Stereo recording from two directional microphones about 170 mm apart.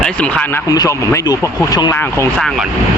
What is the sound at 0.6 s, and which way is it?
Speech, 20° left (ahead or behind).